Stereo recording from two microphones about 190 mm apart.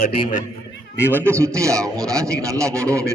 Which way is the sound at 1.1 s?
10° right (ahead or behind).